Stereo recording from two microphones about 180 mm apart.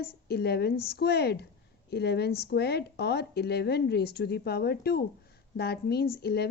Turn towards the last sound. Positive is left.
turn(degrees=60)  # may be behind; listen again after turning